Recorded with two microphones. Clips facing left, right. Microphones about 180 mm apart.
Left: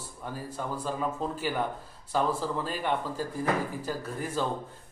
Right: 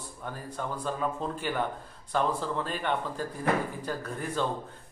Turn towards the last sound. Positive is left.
turn(degrees=5)  # may be behind; listen again after turning